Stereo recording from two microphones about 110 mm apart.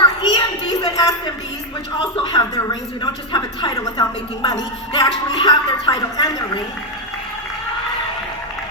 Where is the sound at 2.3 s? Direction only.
40° left (ahead or behind).